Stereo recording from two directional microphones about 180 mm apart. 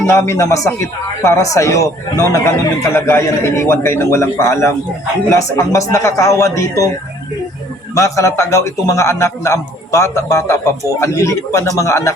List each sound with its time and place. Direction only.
0.0 s speech: 15° left (ahead or behind)
7.9 s speech: 15° left (ahead or behind)